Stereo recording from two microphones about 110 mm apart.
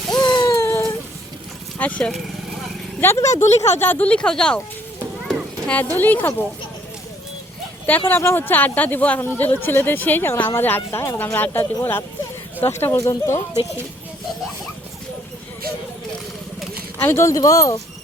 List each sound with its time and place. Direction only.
0.1 s a sound: 40° left (ahead or behind)
0.4 s a sound: 25° left (ahead or behind)
1.8 s speech: 10° left (ahead or behind)
3.0 s a woman's voice: 25° left (ahead or behind); by 4.6 s 10° left (ahead or behind)
5.2 s clip-clop: centre (ahead or behind)
5.7 s speech: 20° left (ahead or behind)
7.9 s a woman's voice: 20° left (ahead or behind)
17.0 s a woman's voice: 25° left (ahead or behind)